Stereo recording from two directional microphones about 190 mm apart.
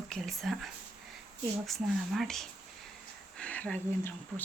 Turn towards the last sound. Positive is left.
turn(degrees=10)  # may be behind; listen again after turning